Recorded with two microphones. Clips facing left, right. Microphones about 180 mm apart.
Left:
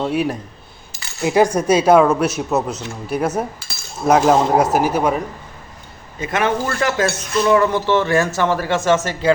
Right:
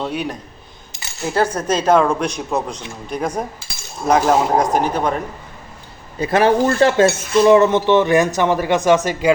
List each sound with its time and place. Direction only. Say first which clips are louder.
0.0 s speech: left 4 dB; 5° left (ahead or behind)
6.1 s speech: right 5 dB; 35° right (ahead or behind); by 9.3 s 15° right (ahead or behind)